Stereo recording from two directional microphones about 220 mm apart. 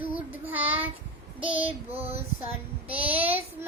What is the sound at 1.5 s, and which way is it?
Speech, 25° right (ahead or behind).